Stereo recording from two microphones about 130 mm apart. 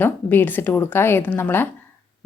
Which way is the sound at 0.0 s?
15° left (ahead or behind).